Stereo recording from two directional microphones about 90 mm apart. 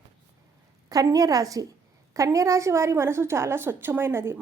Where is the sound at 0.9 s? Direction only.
40° right (ahead or behind).